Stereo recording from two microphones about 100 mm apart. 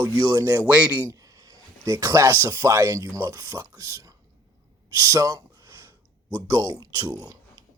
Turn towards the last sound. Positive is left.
turn(degrees=-40)  # may be behind; listen again after turning